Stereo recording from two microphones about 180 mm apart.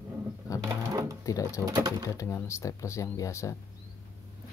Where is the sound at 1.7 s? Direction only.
20° right (ahead or behind).